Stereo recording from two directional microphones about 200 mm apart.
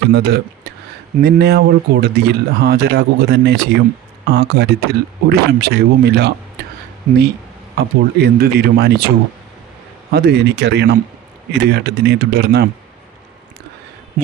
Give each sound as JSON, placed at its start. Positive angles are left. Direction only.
{"t": 0.1, "sound": "speech", "side_deg": -55}
{"t": 7.1, "sound": "speech", "side_deg": -40}
{"t": 7.8, "sound": "speech", "side_deg": -55}